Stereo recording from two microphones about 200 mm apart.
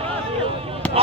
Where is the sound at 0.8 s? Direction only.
5° left (ahead or behind).